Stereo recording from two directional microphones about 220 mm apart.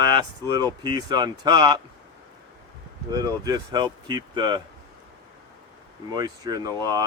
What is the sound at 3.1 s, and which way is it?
Speech, 15° right (ahead or behind).